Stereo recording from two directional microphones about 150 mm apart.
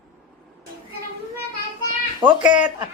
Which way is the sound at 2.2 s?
30° right (ahead or behind).